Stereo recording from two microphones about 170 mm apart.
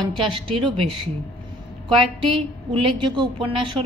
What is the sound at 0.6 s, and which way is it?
Speech, 30° right (ahead or behind).